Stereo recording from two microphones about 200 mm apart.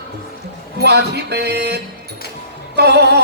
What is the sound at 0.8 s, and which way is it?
Speech, 55° right (ahead or behind).